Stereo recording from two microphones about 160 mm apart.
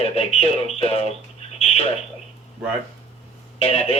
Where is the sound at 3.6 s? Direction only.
40° left (ahead or behind).